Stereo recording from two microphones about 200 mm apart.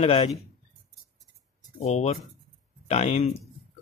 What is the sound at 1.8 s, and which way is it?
Speech, 35° left (ahead or behind).